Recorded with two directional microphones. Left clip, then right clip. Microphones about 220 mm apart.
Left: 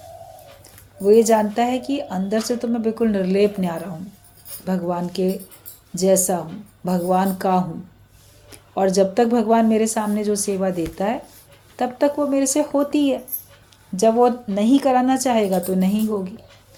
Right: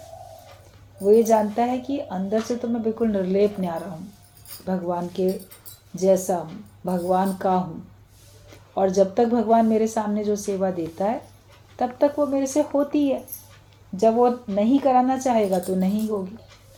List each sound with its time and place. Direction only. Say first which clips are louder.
1.0 s speech: left 2 dB; 40° left (ahead or behind)
8.7 s speech: left 2 dB; 40° left (ahead or behind)